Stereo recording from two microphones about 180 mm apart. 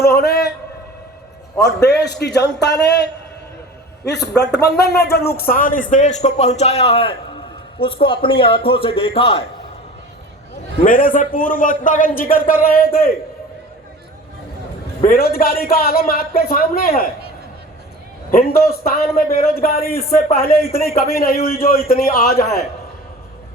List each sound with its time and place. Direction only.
0.0 s a sound: 60° left (ahead or behind)
1.6 s a man's voice: 65° left (ahead or behind); by 9.4 s 30° left (ahead or behind)
10.8 s a man's voice: 50° left (ahead or behind)
15.0 s a man's voice: 55° left (ahead or behind)
18.3 s a man's voice: 55° left (ahead or behind)